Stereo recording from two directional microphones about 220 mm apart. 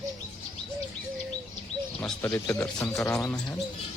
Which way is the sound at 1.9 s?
10° left (ahead or behind).